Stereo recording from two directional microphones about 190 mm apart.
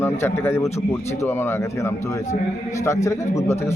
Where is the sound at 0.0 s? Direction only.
10° left (ahead or behind).